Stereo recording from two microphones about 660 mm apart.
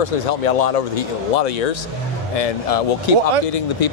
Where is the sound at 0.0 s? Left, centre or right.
Left.